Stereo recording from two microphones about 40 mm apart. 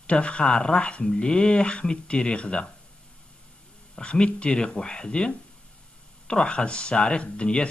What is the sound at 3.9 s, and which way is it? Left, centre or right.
Speech, left.